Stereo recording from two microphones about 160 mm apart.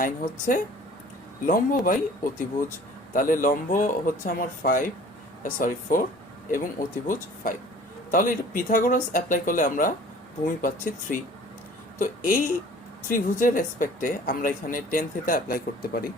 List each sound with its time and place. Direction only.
0.0 s speech: 60° left (ahead or behind)
11.9 s speech: 60° left (ahead or behind)